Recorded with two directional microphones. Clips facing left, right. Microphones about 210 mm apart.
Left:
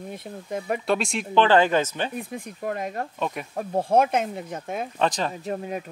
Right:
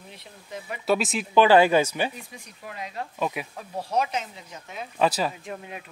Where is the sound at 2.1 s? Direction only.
55° left (ahead or behind).